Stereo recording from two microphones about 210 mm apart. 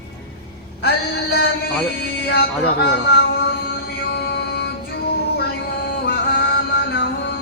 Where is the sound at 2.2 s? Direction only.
50° left (ahead or behind).